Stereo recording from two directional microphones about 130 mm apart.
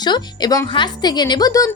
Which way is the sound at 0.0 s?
35° left (ahead or behind).